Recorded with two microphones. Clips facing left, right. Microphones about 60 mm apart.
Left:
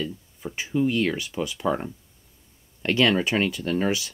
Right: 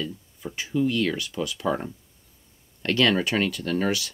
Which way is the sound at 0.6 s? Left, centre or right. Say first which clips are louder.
Left 1 dB; left.